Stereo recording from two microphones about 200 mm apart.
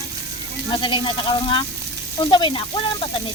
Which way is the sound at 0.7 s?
25° left (ahead or behind).